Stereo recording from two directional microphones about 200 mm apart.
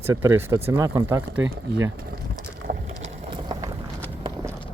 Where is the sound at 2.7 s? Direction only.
40° right (ahead or behind).